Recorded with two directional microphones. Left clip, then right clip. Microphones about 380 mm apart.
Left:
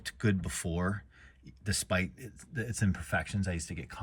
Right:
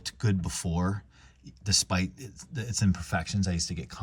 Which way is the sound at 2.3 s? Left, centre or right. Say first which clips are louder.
Right 3 dB; centre.